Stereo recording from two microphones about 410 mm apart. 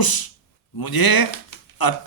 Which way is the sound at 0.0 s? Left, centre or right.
Left.